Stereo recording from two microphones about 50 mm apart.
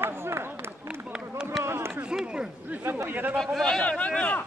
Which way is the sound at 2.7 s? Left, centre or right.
Right.